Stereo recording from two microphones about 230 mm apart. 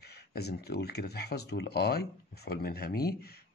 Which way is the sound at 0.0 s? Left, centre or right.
Left.